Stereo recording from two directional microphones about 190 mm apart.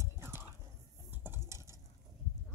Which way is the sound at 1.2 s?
10° right (ahead or behind).